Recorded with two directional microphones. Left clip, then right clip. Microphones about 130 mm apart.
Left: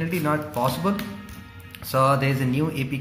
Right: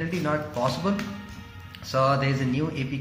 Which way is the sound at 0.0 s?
25° left (ahead or behind).